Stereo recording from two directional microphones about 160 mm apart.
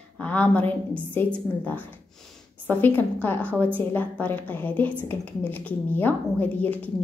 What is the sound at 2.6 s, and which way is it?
A woman's voice, 10° left (ahead or behind).